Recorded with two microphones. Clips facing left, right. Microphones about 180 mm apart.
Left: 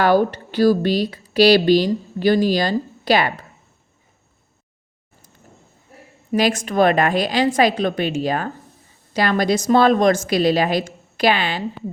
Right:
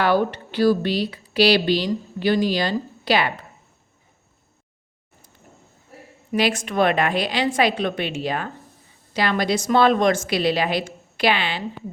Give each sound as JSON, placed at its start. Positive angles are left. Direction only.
{"t": 0.0, "sound": "speech", "side_deg": 40}
{"t": 6.3, "sound": "a woman's voice", "side_deg": 40}